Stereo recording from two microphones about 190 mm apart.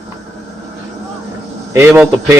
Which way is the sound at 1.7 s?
10° right (ahead or behind).